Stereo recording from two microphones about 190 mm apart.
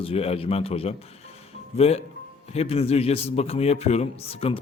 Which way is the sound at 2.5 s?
30° left (ahead or behind).